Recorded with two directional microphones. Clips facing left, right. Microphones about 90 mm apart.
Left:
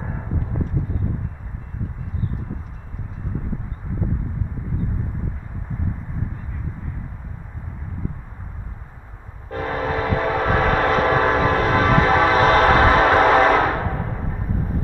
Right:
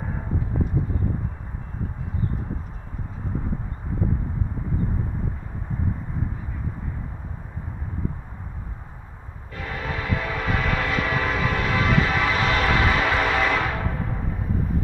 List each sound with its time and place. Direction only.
9.5 s train: 40° left (ahead or behind)